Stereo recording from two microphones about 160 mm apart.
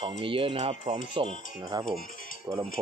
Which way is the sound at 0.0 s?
30° right (ahead or behind).